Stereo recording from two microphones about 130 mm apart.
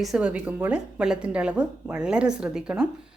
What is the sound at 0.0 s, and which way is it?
A woman's voice, 5° right (ahead or behind).